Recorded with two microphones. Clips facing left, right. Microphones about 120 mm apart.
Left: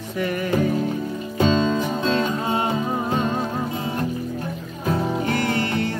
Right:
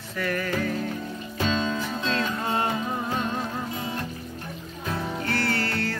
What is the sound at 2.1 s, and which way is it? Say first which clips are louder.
Music: left 4 dB; 15° left (ahead or behind).